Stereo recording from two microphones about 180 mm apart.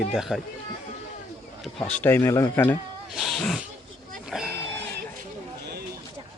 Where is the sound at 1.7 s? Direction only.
5° left (ahead or behind).